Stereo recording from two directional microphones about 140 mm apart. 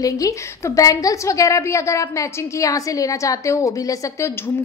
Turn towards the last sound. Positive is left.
turn(degrees=25)  # may be behind; listen again after turning